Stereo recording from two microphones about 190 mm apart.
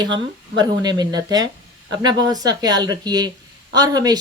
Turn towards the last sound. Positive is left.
turn(degrees=-20)  # may be behind; listen again after turning